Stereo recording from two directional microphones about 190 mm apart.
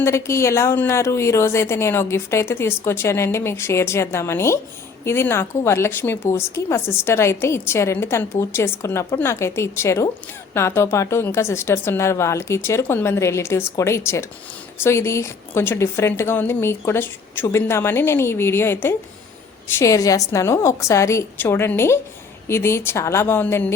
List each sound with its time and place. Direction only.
0.0 s speech: 15° left (ahead or behind)